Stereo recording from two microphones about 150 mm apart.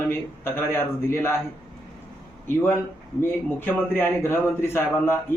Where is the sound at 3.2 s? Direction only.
15° left (ahead or behind).